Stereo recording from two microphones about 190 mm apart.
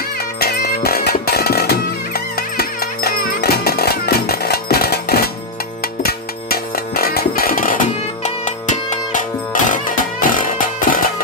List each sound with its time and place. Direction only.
0.3 s music: 55° left (ahead or behind)